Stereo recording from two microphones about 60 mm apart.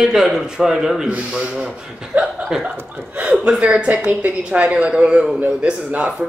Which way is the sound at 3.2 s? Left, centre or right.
Centre.